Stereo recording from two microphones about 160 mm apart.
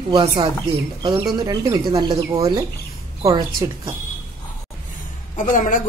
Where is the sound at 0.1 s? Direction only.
30° right (ahead or behind).